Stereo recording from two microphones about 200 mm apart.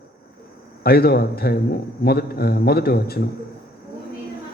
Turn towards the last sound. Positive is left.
turn(degrees=50)  # may be behind; listen again after turning